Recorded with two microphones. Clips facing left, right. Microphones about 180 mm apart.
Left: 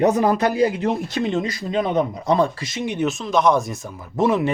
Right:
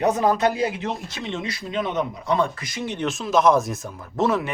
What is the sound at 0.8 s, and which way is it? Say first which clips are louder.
Speech: left 8 dB; 55° left (ahead or behind).